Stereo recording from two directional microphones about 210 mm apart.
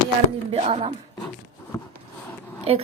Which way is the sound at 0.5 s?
30° right (ahead or behind).